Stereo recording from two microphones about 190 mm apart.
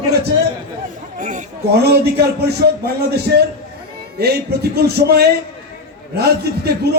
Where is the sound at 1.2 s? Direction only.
40° right (ahead or behind).